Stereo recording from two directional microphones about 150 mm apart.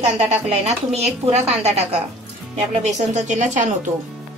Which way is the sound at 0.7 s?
45° right (ahead or behind).